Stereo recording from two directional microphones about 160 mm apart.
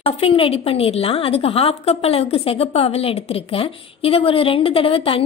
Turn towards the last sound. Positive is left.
turn(degrees=35)  # may be behind; listen again after turning